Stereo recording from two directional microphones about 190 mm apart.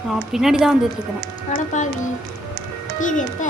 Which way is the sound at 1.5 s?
40° left (ahead or behind).